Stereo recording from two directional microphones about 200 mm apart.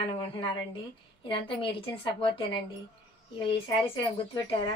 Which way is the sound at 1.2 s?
25° left (ahead or behind).